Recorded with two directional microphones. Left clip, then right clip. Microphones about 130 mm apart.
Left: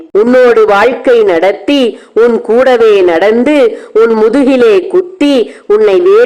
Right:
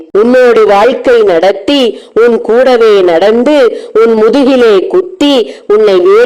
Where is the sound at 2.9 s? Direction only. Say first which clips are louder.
Right 1 dB; 35° right (ahead or behind).